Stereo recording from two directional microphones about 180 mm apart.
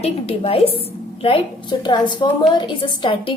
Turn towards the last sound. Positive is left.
turn(degrees=30)  # may be behind; listen again after turning